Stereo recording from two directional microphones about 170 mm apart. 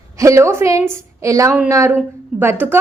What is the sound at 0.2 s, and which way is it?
A woman's voice, 15° right (ahead or behind).